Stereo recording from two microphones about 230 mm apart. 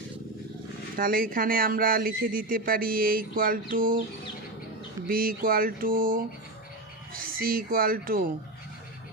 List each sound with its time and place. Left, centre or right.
0.9 s speech: right
5.0 s speech: right